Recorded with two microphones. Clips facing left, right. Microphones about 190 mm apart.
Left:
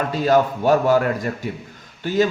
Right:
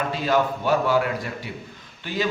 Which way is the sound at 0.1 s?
45° left (ahead or behind).